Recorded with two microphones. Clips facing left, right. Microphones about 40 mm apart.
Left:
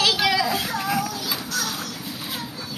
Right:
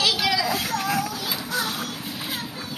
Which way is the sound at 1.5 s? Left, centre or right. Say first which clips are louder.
Right 2 dB; centre.